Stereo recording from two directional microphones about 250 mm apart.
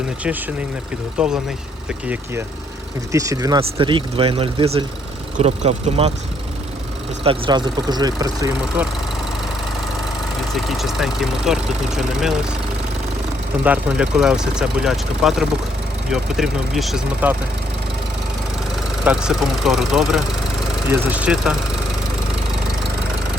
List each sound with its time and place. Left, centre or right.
1.2 s speech: centre
3.1 s speech: centre
7.3 s speech: centre
10.5 s speech: centre
13.7 s speech: centre
19.0 s speech: centre